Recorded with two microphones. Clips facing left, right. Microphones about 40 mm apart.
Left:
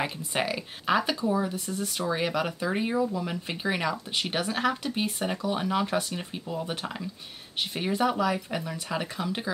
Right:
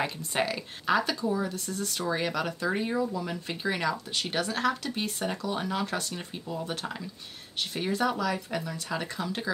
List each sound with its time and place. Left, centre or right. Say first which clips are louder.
0.0 s speech: even; centre